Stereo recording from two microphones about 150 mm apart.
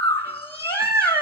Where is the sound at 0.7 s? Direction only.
90° left.